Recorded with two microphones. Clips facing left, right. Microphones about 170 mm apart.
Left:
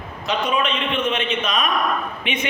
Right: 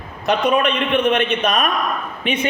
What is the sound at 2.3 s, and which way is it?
Speech, 40° right (ahead or behind).